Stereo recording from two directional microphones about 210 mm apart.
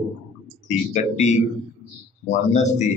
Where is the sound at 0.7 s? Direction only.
35° left (ahead or behind).